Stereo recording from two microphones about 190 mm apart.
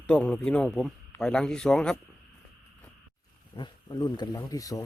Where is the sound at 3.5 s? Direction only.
25° left (ahead or behind).